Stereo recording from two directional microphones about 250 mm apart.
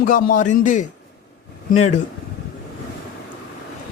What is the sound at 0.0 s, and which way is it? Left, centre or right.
Speech, left.